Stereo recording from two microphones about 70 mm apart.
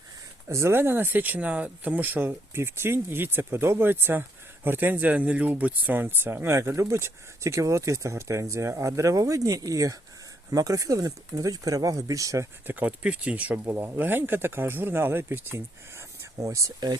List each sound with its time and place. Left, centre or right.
0.4 s speech: right
12.6 s speech: right